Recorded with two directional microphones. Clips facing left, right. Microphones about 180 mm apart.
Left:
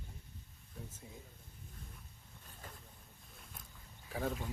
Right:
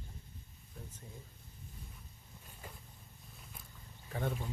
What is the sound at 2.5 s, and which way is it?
Boat, 10° right (ahead or behind).